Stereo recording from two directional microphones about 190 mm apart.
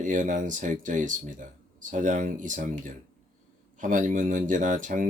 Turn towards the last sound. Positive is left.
turn(degrees=-45)  # may be behind; listen again after turning